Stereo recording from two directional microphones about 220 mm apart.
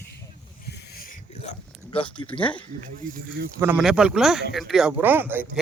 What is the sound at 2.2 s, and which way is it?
Speech, 15° left (ahead or behind).